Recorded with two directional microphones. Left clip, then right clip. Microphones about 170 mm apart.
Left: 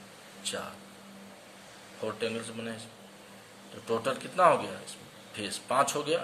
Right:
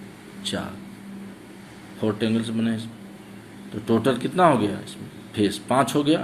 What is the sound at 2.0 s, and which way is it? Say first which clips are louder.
Speech: right 8 dB; 20° right (ahead or behind).